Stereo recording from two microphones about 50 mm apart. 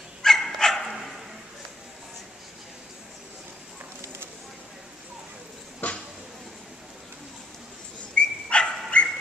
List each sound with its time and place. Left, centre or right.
0.2 s dog: centre
5.8 s a sound: left
8.2 s dog: left